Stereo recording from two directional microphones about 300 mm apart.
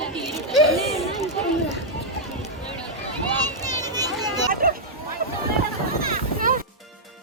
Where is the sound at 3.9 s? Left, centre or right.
Centre.